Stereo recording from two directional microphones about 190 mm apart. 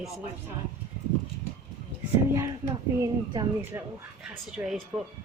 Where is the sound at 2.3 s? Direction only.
15° right (ahead or behind).